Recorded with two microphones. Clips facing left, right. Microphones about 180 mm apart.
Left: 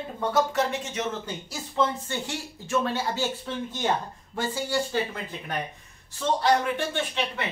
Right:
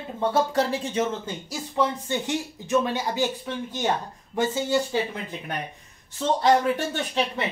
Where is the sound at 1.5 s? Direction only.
15° right (ahead or behind).